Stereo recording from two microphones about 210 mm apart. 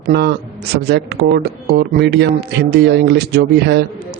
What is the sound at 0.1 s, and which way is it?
Speech, 50° right (ahead or behind).